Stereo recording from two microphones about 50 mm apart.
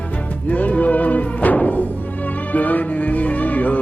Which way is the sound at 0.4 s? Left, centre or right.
Left.